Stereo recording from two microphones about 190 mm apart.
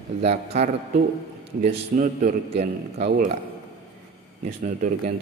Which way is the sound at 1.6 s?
45° right (ahead or behind).